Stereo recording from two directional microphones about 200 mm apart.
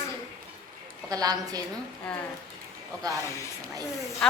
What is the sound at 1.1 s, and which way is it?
Speech, 20° right (ahead or behind).